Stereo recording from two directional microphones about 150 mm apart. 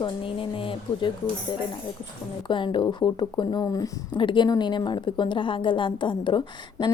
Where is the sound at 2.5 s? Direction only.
35° left (ahead or behind).